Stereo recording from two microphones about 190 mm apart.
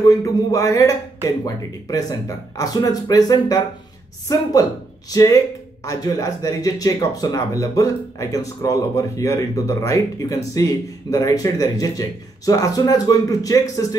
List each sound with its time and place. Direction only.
0.0 s speech: 15° left (ahead or behind)